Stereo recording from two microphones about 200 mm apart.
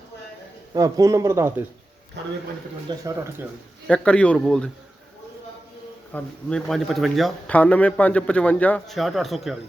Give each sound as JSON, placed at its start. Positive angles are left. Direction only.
{"t": 0.7, "sound": "speech", "side_deg": -15}
{"t": 2.9, "sound": "speech", "side_deg": -20}
{"t": 3.8, "sound": "speech", "side_deg": 5}
{"t": 6.1, "sound": "speech", "side_deg": 5}